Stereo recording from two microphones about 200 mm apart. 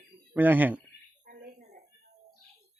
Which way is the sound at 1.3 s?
45° right (ahead or behind).